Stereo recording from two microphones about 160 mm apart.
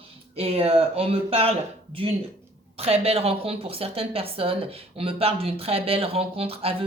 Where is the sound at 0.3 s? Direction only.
40° right (ahead or behind).